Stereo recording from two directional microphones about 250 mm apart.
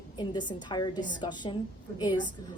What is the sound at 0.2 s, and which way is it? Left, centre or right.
A woman's voice, centre.